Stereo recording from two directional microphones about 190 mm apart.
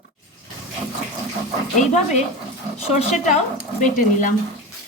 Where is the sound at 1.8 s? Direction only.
40° left (ahead or behind).